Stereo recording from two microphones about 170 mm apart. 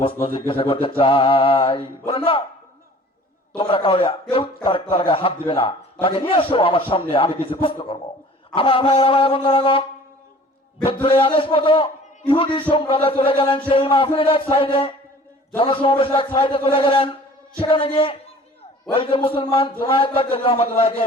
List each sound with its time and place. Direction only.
0.0 s a man's voice: 30° left (ahead or behind)
3.6 s a man's voice: 30° left (ahead or behind)
10.8 s a man's voice: 30° left (ahead or behind)